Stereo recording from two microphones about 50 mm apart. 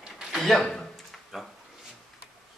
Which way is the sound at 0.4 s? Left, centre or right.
Centre.